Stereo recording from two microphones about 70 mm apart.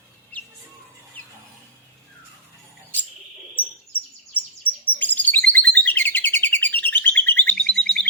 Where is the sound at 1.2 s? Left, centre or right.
Left.